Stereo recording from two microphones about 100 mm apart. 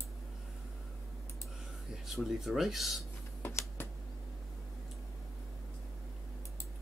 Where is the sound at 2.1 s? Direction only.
5° right (ahead or behind).